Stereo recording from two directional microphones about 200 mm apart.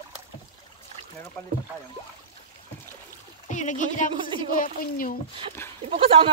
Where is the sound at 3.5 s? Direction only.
40° left (ahead or behind).